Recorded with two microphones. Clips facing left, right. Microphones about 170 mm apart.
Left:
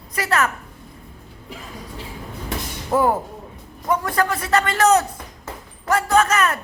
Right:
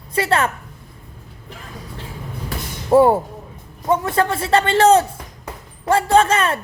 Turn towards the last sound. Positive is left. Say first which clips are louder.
# right 3 dB
turn(degrees=-30)  # may be behind; listen again after turning